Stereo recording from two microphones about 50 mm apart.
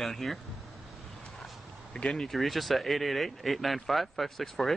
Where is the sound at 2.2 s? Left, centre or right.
Centre.